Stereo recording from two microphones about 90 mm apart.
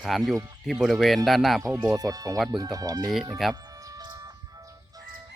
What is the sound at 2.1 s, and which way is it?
Speech, 45° right (ahead or behind).